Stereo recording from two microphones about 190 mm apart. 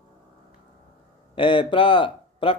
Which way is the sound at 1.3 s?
25° left (ahead or behind).